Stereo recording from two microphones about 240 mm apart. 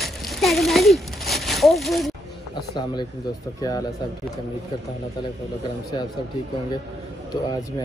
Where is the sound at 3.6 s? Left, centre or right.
Centre.